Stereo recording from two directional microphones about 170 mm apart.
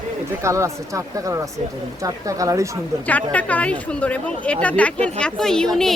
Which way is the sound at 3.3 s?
10° left (ahead or behind).